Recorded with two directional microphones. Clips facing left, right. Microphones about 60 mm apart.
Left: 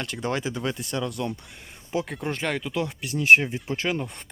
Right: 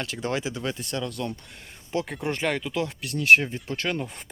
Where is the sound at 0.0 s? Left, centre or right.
Centre.